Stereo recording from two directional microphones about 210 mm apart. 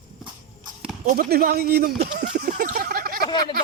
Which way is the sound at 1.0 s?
45° right (ahead or behind).